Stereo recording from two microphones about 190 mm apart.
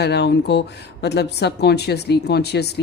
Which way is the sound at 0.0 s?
60° left (ahead or behind).